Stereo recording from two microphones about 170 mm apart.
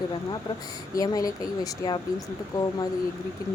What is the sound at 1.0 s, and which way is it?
Speech, 20° left (ahead or behind).